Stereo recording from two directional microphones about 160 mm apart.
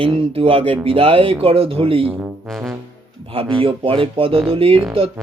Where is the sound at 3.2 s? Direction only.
35° right (ahead or behind).